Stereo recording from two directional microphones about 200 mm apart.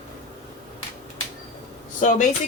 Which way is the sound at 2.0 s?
40° left (ahead or behind).